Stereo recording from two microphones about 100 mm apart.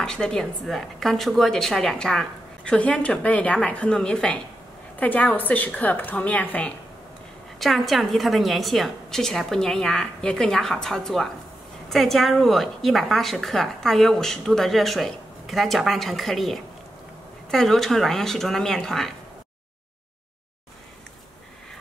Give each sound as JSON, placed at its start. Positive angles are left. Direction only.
{"t": 0.0, "sound": "a woman's voice", "side_deg": 5}
{"t": 7.5, "sound": "a woman's voice", "side_deg": 0}